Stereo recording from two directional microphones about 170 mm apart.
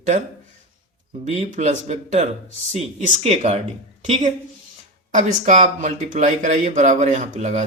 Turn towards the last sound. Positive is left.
turn(degrees=-45)  # may be behind; listen again after turning